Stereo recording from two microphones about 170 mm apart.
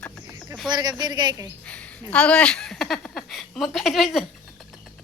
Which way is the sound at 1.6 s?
5° left (ahead or behind).